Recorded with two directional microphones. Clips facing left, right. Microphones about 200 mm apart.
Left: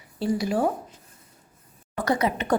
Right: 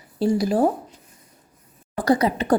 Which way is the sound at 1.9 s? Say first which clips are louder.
Right 5 dB; 35° right (ahead or behind).